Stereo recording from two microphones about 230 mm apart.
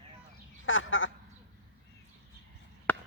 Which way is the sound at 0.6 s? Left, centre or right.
Left.